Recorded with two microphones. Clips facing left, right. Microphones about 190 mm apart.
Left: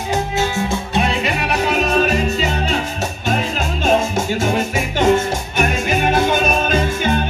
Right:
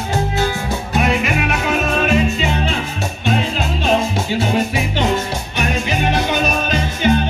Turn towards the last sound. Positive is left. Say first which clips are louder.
# even
turn(degrees=50)  # may be behind; listen again after turning